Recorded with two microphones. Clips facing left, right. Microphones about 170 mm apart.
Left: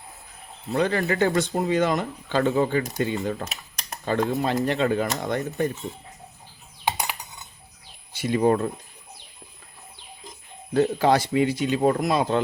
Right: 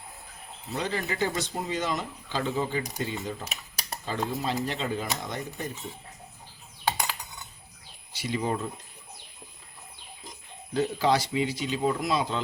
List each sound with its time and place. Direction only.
0.7 s speech: 60° left (ahead or behind)
8.1 s speech: 50° left (ahead or behind)
10.8 s speech: 55° left (ahead or behind)